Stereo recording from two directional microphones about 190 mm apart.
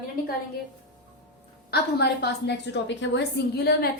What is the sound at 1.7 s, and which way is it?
A woman's voice, 60° left (ahead or behind).